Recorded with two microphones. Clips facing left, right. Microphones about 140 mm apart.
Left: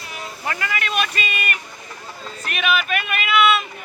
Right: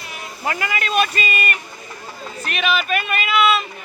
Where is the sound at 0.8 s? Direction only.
35° right (ahead or behind).